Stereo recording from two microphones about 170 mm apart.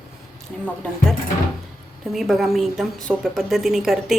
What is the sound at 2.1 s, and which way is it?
Speech, centre (ahead or behind).